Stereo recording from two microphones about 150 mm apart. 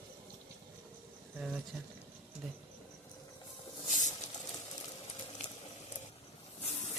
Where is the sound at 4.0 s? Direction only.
55° left (ahead or behind).